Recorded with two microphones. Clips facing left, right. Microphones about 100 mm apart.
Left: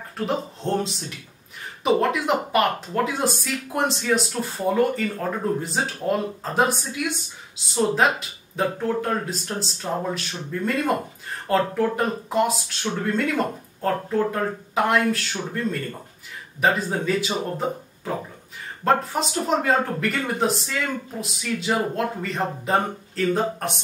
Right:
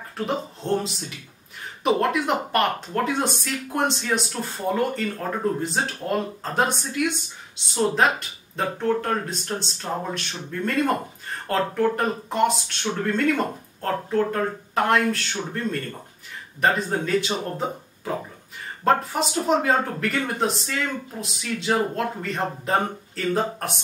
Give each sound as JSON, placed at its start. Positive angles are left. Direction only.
{"t": 0.2, "sound": "speech", "side_deg": 0}